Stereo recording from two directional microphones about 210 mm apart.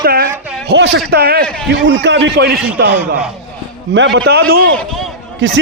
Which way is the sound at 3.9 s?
60° right (ahead or behind).